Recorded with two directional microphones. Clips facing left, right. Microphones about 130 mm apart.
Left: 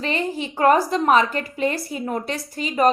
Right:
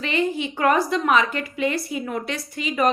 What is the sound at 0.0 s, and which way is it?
A woman's voice, 40° left (ahead or behind).